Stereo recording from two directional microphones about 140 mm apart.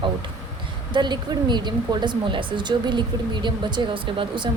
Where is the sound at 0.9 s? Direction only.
30° right (ahead or behind).